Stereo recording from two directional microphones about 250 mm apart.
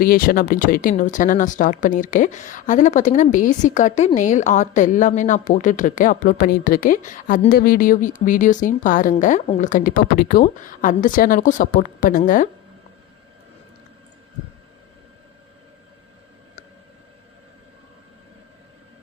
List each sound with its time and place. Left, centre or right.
0.0 s speech: left